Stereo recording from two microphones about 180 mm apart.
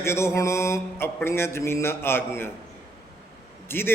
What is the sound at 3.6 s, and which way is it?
Speech, 10° left (ahead or behind).